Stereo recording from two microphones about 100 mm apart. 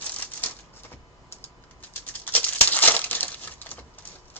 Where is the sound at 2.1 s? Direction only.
15° left (ahead or behind).